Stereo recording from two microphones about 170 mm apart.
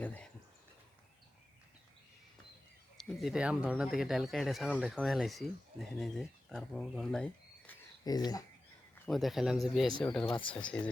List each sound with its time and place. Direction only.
0.0 s a sound: 10° left (ahead or behind)
3.0 s speech: centre (ahead or behind)
8.0 s speech: 25° left (ahead or behind)
9.0 s speech: centre (ahead or behind)